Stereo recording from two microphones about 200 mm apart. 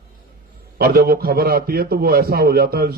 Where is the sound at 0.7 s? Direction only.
50° right (ahead or behind).